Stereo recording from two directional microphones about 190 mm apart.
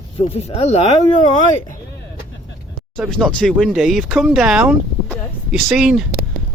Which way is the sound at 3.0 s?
5° left (ahead or behind).